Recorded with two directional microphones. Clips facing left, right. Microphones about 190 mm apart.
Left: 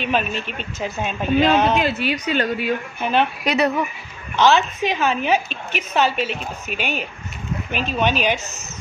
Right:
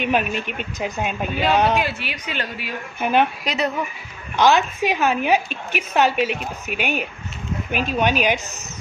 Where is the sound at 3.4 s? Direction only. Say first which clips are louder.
Left 4 dB; 65° left (ahead or behind).